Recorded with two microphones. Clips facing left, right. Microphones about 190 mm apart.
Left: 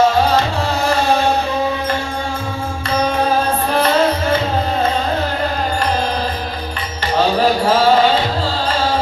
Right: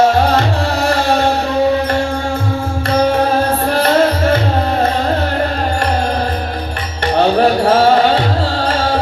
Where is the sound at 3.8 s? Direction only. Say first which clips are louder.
Right 3 dB; 60° right (ahead or behind).